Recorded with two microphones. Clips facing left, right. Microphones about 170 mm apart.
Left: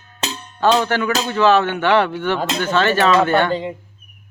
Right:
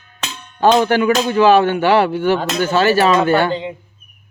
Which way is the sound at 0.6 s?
15° right (ahead or behind).